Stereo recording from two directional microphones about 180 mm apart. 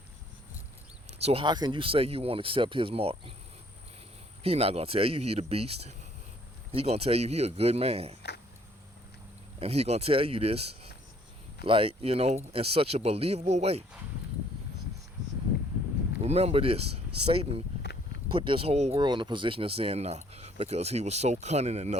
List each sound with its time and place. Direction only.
1.2 s speech: 30° right (ahead or behind)
4.4 s speech: 35° right (ahead or behind)
9.6 s speech: 35° right (ahead or behind)
16.2 s speech: 35° right (ahead or behind)